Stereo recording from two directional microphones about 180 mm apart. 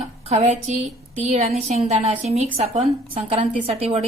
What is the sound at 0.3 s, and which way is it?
A woman's voice, 40° right (ahead or behind).